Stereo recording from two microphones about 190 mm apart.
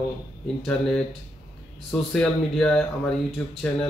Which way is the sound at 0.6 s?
5° left (ahead or behind).